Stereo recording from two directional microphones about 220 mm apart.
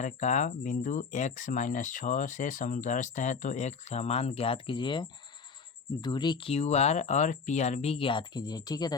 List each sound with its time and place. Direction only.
0.0 s speech: 35° left (ahead or behind); by 9.0 s 15° left (ahead or behind)